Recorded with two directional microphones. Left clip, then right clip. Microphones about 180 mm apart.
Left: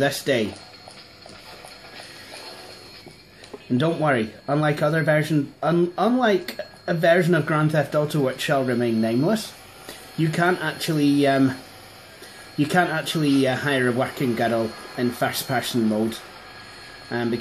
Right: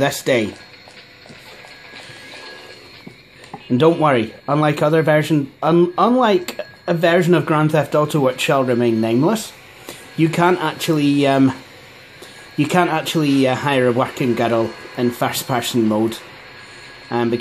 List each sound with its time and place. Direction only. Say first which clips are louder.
0.0 s speech: right 4 dB; 50° right (ahead or behind)
3.7 s speech: right 7 dB; 50° right (ahead or behind)
12.5 s speech: right 4 dB; 50° right (ahead or behind)